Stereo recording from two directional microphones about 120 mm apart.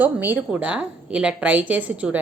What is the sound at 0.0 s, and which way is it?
Speech, 15° right (ahead or behind).